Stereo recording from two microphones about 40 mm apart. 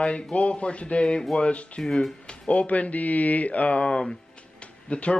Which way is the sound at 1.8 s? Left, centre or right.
Centre.